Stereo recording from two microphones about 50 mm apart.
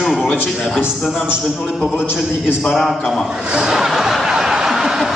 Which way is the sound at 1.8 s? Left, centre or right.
Centre.